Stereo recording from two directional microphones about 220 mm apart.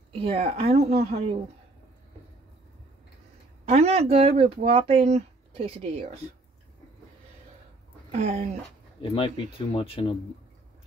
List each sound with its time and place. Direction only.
0.2 s speech: 25° right (ahead or behind)
3.6 s speech: 30° right (ahead or behind)
8.1 s speech: 30° right (ahead or behind)
9.1 s speech: 25° left (ahead or behind)